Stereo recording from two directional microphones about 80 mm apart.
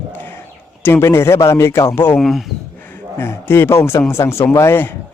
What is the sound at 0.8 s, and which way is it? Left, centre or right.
A man's voice, left.